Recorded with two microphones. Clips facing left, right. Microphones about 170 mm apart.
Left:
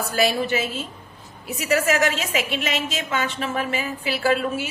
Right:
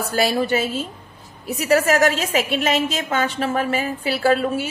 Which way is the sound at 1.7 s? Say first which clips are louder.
Right 4 dB; 45° right (ahead or behind).